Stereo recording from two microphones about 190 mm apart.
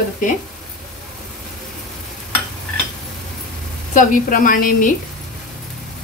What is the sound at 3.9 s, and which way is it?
A woman's voice, 45° left (ahead or behind).